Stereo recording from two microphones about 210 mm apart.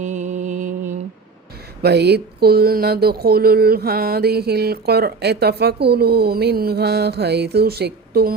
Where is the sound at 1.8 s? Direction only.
50° right (ahead or behind).